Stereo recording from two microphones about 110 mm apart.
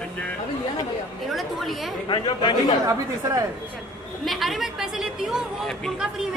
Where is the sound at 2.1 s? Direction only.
40° left (ahead or behind).